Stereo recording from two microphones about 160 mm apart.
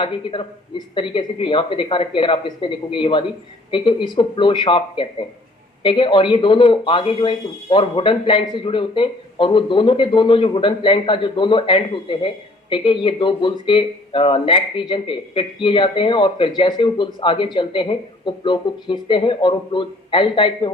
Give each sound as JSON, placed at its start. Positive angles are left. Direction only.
{"t": 0.0, "sound": "speech", "side_deg": 30}